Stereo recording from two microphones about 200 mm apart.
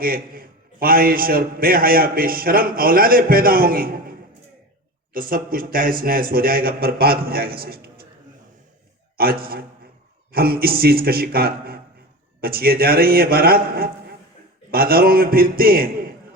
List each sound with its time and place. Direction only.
0.0 s a man's voice: 45° right (ahead or behind)
5.1 s a man's voice: 45° right (ahead or behind)
9.1 s a man's voice: 50° right (ahead or behind)